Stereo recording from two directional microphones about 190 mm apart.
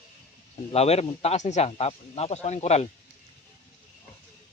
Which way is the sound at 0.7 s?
35° left (ahead or behind).